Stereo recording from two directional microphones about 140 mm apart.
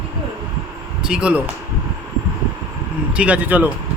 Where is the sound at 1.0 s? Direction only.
5° right (ahead or behind).